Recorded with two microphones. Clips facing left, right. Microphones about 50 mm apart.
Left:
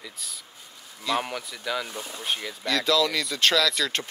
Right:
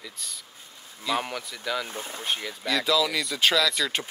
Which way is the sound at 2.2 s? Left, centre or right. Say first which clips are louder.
Left 1 dB; centre.